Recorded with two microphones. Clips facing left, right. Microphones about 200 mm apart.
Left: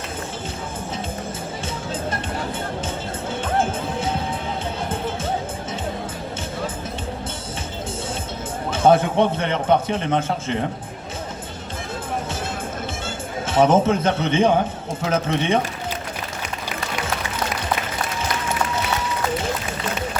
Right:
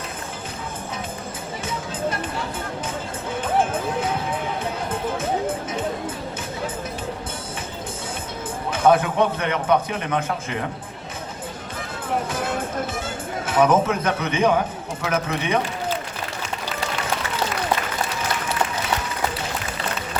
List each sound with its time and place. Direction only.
8.7 s a man's voice: 30° left (ahead or behind)
13.5 s a man's voice: 25° left (ahead or behind)